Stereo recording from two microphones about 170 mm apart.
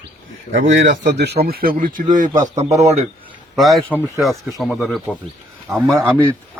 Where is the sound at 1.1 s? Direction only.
75° right (ahead or behind); by 2.4 s 50° right (ahead or behind).